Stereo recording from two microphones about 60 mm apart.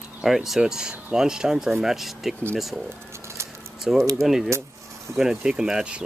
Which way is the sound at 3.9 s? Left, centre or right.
Centre.